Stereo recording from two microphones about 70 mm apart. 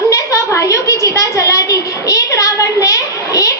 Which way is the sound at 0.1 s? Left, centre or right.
Left.